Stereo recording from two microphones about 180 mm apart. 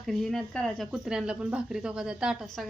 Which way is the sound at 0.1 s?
Centre (ahead or behind).